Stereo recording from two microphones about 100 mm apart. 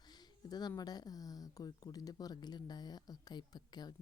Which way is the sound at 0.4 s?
40° left (ahead or behind).